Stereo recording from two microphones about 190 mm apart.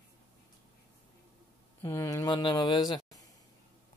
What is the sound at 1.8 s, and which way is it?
Speech, 15° left (ahead or behind).